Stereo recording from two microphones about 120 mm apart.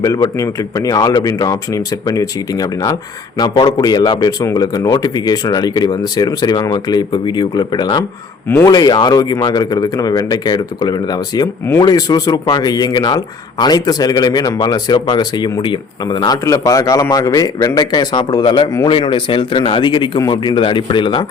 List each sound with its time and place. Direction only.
0.0 s speech: 30° left (ahead or behind)